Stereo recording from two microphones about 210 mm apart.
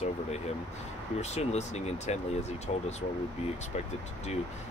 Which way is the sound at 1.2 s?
30° left (ahead or behind).